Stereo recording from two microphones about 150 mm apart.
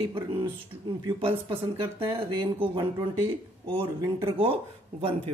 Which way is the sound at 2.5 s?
30° right (ahead or behind).